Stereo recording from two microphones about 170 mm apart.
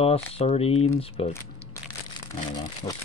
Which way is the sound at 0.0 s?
35° left (ahead or behind).